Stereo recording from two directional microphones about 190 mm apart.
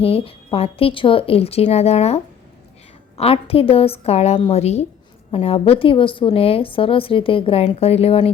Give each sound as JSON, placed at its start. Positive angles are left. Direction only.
{"t": 0.0, "sound": "a woman's voice", "side_deg": 30}